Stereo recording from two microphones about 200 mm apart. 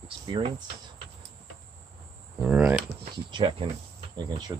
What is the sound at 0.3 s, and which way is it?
Speech, 25° right (ahead or behind).